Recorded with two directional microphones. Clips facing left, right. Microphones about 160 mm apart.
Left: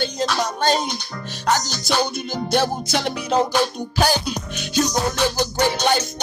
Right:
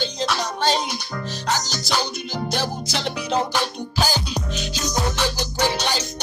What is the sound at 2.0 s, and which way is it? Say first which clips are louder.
Music: left 2 dB; 55° left (ahead or behind).